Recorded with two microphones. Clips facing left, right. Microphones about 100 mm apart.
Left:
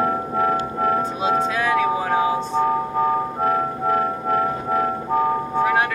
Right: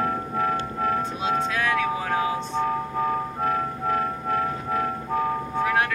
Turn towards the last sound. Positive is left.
turn(degrees=5)  # may be behind; listen again after turning